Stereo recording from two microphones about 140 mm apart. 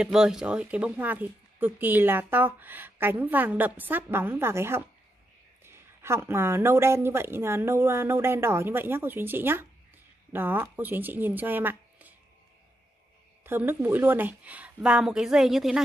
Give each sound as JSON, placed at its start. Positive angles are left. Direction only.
{"t": 0.0, "sound": "speech", "side_deg": -5}
{"t": 13.4, "sound": "speech", "side_deg": -15}